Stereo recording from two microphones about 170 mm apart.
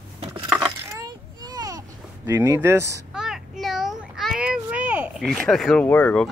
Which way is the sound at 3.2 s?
Centre (ahead or behind).